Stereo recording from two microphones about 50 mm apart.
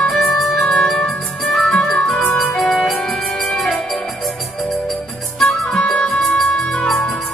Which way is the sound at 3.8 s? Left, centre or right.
Centre.